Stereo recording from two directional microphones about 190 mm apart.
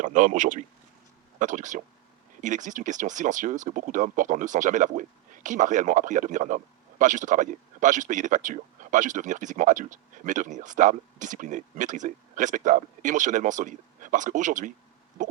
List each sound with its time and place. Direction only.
0.0 s speech: 40° right (ahead or behind)